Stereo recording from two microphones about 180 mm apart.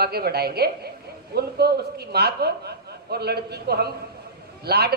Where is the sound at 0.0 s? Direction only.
60° right (ahead or behind).